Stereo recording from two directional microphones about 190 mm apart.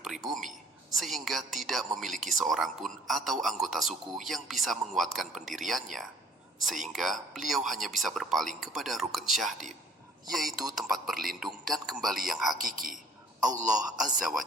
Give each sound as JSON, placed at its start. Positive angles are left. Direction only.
{"t": 0.0, "sound": "a sound", "side_deg": 0}
{"t": 0.9, "sound": "a man's voice", "side_deg": 0}
{"t": 12.5, "sound": "a woman's voice", "side_deg": -45}
{"t": 13.7, "sound": "a man's voice", "side_deg": 0}